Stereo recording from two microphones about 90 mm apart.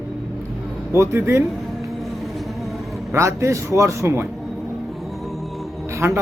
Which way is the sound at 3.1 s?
35° right (ahead or behind).